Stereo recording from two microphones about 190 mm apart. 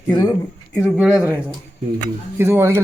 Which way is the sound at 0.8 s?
Centre (ahead or behind).